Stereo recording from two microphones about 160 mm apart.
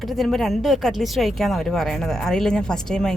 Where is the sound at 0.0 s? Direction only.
Centre (ahead or behind).